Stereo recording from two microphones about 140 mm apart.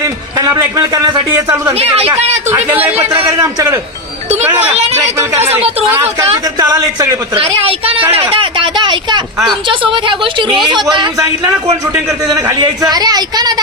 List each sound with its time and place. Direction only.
0.0 s a man's voice: 25° right (ahead or behind)
1.7 s speech: 45° right (ahead or behind)
2.5 s a man's voice: 15° right (ahead or behind)
3.1 s a woman's voice: 30° right (ahead or behind)
4.4 s a man's voice: 15° right (ahead or behind)
5.4 s speech: 45° right (ahead or behind)
5.9 s a man's voice: 15° right (ahead or behind)
7.3 s a woman's voice: 45° right (ahead or behind)
11.9 s a man's voice: 5° right (ahead or behind)
12.3 s a man's voice: 25° right (ahead or behind)